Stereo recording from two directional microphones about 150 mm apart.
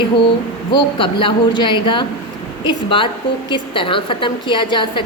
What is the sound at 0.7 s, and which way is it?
A woman's voice, 35° left (ahead or behind).